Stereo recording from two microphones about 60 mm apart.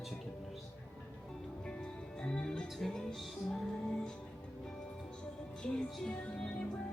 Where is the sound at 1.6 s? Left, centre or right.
Centre.